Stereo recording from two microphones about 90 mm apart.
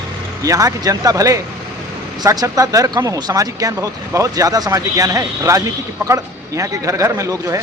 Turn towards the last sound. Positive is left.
turn(degrees=-40)  # may be behind; listen again after turning